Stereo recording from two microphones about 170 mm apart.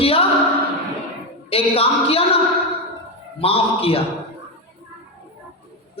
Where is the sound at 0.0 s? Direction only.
35° left (ahead or behind).